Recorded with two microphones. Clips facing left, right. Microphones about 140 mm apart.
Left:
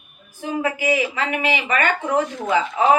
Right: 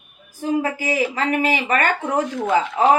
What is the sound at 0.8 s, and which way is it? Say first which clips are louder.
A woman's voice: even; 40° right (ahead or behind).